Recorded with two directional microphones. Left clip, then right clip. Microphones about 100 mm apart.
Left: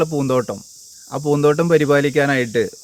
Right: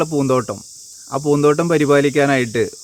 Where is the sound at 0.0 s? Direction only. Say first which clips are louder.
Right 1 dB; 30° right (ahead or behind).